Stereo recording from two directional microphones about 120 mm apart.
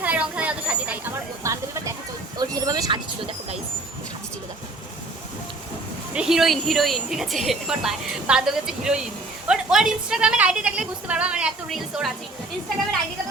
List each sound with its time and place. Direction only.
0.0 s a sound: 10° right (ahead or behind)
1.5 s music: 25° right (ahead or behind)
2.4 s vehicle: 30° right (ahead or behind)
6.1 s a woman's voice: 5° right (ahead or behind)